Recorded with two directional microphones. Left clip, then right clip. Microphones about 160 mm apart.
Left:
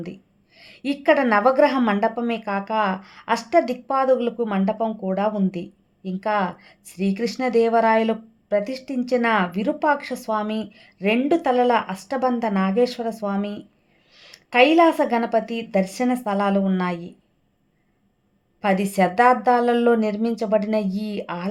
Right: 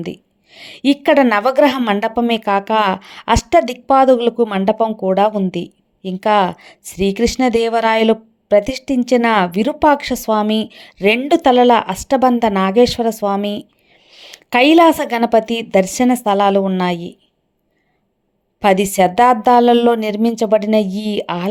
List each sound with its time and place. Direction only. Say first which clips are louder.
0.0 s a woman's voice: right 9 dB; 40° right (ahead or behind)
18.6 s a woman's voice: right 8 dB; 40° right (ahead or behind)